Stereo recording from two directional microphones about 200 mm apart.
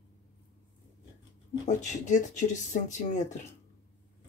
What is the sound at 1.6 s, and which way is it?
Speech, 40° left (ahead or behind).